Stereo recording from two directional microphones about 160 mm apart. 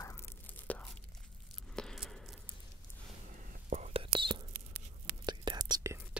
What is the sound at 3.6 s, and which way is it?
Whispering, 45° right (ahead or behind).